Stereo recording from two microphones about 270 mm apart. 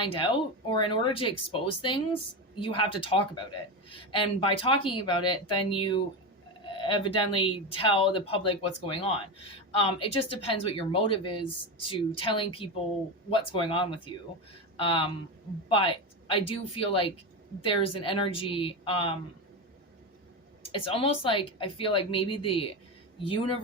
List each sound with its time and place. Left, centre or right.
0.0 s speech: centre
20.6 s speech: left